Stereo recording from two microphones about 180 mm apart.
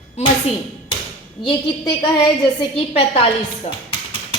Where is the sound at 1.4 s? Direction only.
30° left (ahead or behind).